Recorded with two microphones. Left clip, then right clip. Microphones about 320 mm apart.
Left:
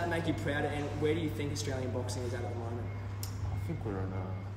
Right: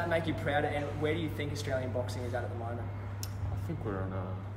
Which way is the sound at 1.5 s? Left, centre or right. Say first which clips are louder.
Right 3 dB; centre.